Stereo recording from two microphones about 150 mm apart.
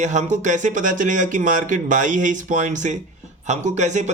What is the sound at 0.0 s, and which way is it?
Speech, 50° right (ahead or behind).